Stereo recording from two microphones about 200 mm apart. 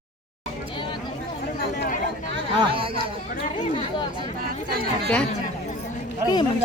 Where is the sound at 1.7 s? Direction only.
40° left (ahead or behind).